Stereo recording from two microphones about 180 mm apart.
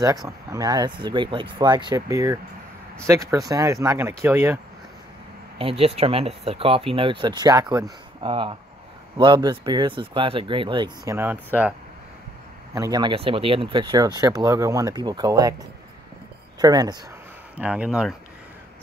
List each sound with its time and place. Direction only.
0.0 s speech: 20° right (ahead or behind)
5.6 s speech: 30° right (ahead or behind)
11.1 s speech: 10° right (ahead or behind)
12.7 s speech: 20° right (ahead or behind)
16.5 s speech: 20° right (ahead or behind)
17.6 s speech: 5° right (ahead or behind)